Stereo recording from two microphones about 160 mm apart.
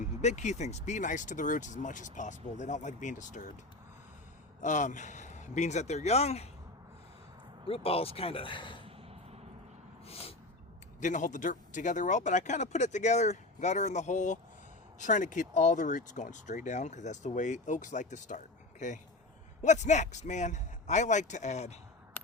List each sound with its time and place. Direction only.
0.0 s speech: 45° left (ahead or behind)
4.6 s speech: 50° left (ahead or behind)
7.7 s speech: 35° left (ahead or behind)
10.1 s a sound: 40° left (ahead or behind)
11.0 s speech: 50° left (ahead or behind)